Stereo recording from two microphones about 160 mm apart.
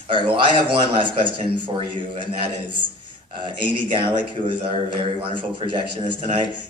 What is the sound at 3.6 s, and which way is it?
A man's voice, 30° right (ahead or behind).